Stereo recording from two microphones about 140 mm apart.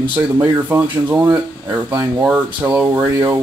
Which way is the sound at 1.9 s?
25° right (ahead or behind).